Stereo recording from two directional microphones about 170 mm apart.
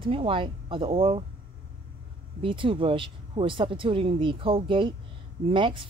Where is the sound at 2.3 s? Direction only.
30° right (ahead or behind).